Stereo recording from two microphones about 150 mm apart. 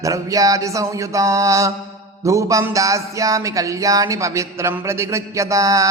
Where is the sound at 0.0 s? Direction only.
20° right (ahead or behind).